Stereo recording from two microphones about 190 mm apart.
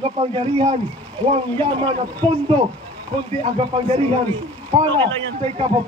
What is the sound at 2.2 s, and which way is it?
Speech, 5° left (ahead or behind).